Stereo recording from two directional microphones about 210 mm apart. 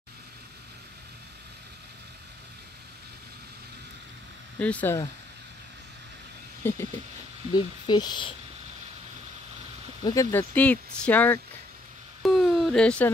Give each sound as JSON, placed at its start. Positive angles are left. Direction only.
{"t": 4.6, "sound": "speech", "side_deg": 5}
{"t": 6.6, "sound": "speech", "side_deg": 10}
{"t": 10.0, "sound": "speech", "side_deg": 15}
{"t": 12.2, "sound": "a sound", "side_deg": 0}